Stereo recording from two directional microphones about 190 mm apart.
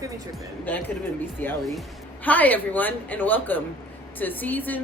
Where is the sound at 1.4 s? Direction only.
10° left (ahead or behind).